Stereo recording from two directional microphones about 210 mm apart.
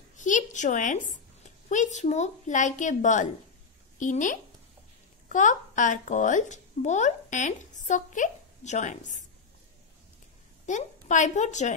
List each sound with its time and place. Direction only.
0.1 s a sound: 35° left (ahead or behind)
1.7 s a woman's voice: 35° left (ahead or behind)
10.7 s a woman's voice: 35° left (ahead or behind)